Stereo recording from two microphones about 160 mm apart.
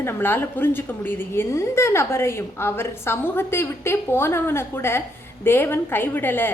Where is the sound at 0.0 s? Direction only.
15° left (ahead or behind).